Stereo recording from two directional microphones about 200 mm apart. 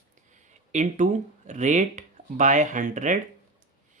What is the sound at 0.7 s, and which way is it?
Speech, 35° right (ahead or behind).